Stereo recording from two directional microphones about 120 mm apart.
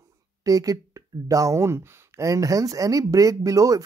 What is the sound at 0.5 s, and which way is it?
Speech, 30° right (ahead or behind).